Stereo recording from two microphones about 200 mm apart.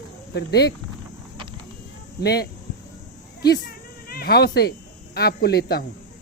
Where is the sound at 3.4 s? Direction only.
50° left (ahead or behind).